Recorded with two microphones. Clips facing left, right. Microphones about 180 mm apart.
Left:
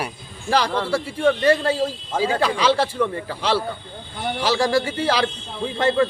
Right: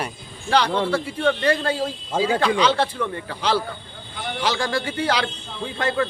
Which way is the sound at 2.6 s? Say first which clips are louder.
Left 1 dB; 10° left (ahead or behind).